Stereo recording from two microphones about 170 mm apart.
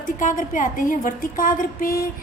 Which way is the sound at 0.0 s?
50° left (ahead or behind).